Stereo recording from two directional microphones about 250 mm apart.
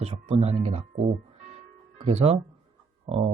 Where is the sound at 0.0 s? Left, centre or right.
Right.